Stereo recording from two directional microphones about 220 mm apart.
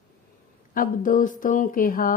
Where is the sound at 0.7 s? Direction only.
40° left (ahead or behind).